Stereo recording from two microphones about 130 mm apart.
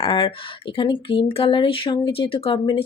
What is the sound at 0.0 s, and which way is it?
Speech, 45° left (ahead or behind).